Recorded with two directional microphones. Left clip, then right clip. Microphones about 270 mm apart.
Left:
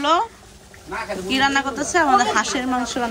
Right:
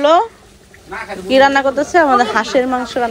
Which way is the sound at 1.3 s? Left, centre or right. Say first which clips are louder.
Right 9 dB; centre.